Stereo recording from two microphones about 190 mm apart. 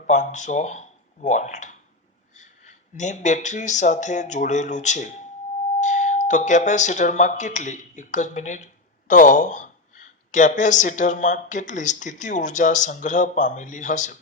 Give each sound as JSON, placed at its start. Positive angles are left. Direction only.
{"t": 0.1, "sound": "speech", "side_deg": 40}